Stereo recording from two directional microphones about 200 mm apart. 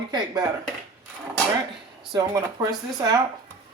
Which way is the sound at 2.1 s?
20° right (ahead or behind).